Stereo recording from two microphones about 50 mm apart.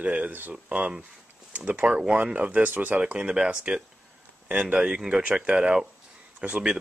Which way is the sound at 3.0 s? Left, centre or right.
Right.